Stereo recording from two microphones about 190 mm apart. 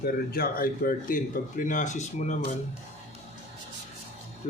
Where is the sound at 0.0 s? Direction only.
50° left (ahead or behind).